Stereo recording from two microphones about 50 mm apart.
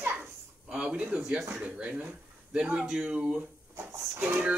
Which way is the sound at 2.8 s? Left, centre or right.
Centre.